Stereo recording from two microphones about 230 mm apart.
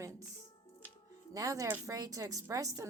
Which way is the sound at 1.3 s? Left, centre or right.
Centre.